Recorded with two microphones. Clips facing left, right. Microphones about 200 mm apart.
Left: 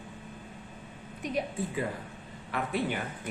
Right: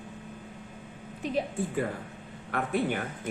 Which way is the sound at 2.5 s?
50° right (ahead or behind).